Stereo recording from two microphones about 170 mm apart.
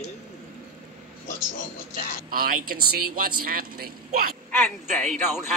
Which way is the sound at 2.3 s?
55° right (ahead or behind).